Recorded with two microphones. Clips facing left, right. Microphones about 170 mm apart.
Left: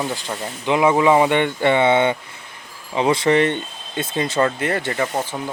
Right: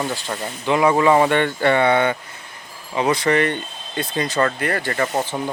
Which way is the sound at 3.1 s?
25° left (ahead or behind).